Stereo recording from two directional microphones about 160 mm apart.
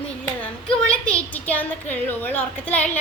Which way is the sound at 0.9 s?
5° left (ahead or behind).